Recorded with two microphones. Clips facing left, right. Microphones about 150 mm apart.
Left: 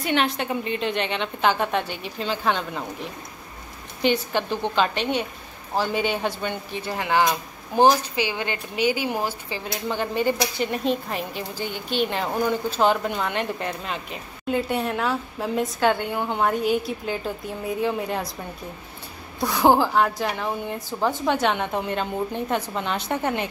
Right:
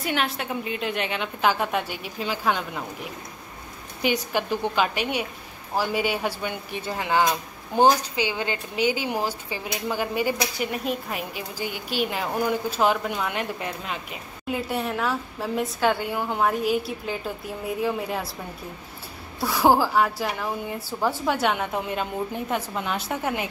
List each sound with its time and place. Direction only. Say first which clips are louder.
0.0 s speech: left 3 dB; 5° right (ahead or behind)
4.0 s speech: left 2 dB; 10° right (ahead or behind)
7.7 s a woman's voice: left 1 dB; 20° right (ahead or behind); by 18.3 s 5° right (ahead or behind)
19.4 s speech: left 1 dB; 5° right (ahead or behind)